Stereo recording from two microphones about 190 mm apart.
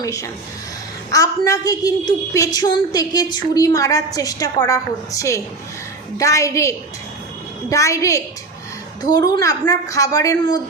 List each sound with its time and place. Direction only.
0.0 s a woman's voice: 15° left (ahead or behind)